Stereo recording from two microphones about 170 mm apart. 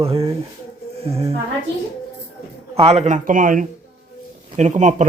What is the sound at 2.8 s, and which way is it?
A man's voice, 40° right (ahead or behind).